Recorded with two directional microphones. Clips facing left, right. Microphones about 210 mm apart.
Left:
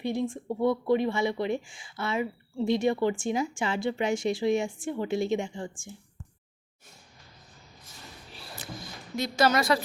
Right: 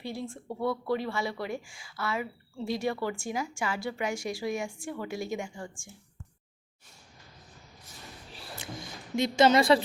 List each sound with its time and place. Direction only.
0.0 s speech: 20° left (ahead or behind)
9.1 s speech: 20° right (ahead or behind)